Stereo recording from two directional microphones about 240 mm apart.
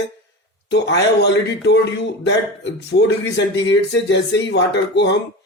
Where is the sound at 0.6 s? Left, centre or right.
Left.